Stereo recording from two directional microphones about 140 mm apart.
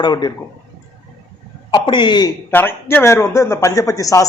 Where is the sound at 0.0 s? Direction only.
30° left (ahead or behind).